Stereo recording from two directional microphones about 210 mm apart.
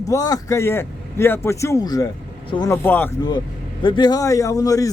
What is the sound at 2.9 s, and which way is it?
Speech, 10° left (ahead or behind).